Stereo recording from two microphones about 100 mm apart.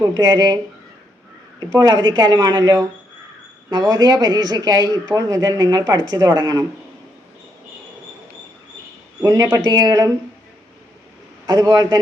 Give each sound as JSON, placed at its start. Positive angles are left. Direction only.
{"t": 0.0, "sound": "speech", "side_deg": -45}
{"t": 9.2, "sound": "speech", "side_deg": -40}
{"t": 11.4, "sound": "speech", "side_deg": -35}